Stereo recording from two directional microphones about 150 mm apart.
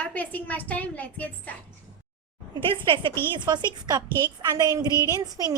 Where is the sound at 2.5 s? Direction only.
35° right (ahead or behind).